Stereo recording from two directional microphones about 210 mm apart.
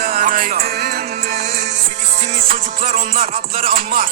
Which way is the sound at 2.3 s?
30° right (ahead or behind).